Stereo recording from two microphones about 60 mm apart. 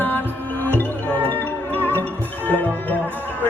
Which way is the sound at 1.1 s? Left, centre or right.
Right.